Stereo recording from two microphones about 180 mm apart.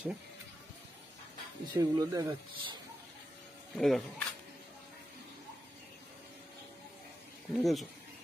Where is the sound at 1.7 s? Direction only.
20° right (ahead or behind).